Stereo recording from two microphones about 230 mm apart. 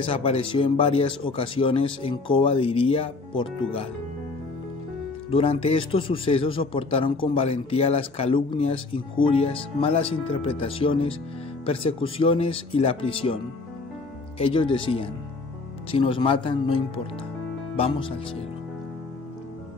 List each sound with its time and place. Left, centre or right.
0.0 s speech: left
5.3 s speech: left
14.4 s speech: left